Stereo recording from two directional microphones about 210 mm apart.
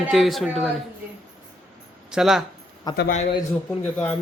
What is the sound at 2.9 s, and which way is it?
Speech, 20° left (ahead or behind).